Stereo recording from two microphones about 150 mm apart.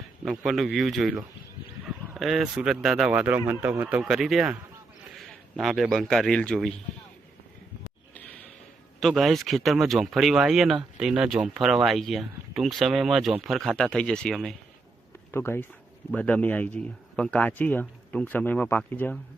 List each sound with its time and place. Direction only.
0.3 s a man's voice: centre (ahead or behind)
9.0 s speech: centre (ahead or behind)
15.3 s a man's voice: 15° left (ahead or behind)